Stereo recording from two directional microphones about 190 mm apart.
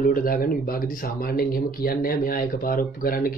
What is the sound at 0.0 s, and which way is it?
Speech, 50° left (ahead or behind).